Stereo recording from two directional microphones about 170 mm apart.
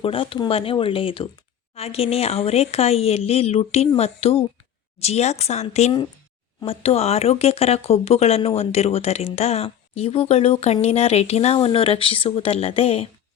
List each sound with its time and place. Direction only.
0.0 s speech: 35° left (ahead or behind)